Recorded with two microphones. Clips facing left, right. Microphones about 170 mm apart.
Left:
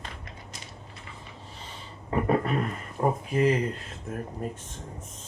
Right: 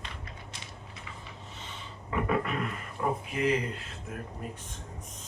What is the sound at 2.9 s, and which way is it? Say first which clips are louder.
Speech: left 6 dB; 40° left (ahead or behind).